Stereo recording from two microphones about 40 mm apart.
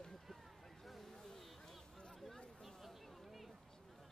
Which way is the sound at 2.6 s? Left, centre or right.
Centre.